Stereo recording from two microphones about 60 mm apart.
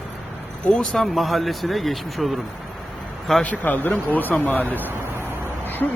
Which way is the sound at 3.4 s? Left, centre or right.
Left.